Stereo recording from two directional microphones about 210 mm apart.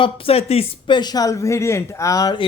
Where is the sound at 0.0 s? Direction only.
30° left (ahead or behind).